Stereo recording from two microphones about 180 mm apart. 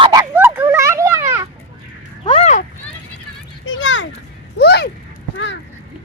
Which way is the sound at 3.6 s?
90° left.